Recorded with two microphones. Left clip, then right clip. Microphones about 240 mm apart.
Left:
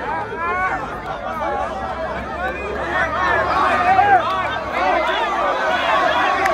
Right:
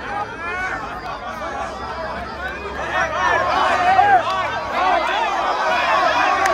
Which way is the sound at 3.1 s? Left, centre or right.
Right.